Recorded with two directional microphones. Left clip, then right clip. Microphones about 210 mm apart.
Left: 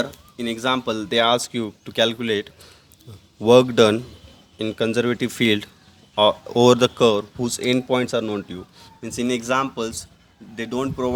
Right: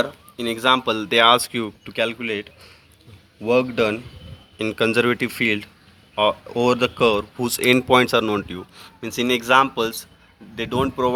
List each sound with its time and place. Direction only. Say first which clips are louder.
0.0 s speech: right 3 dB; 10° left (ahead or behind)
1.9 s speech: left 4 dB; 25° left (ahead or behind)
4.5 s speech: right 3 dB; 10° left (ahead or behind)
7.3 s speech: right 4 dB; 10° left (ahead or behind)